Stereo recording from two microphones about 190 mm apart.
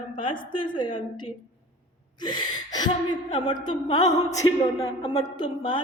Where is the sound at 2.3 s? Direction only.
20° left (ahead or behind).